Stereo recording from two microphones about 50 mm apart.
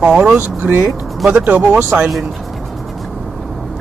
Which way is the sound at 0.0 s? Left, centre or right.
Right.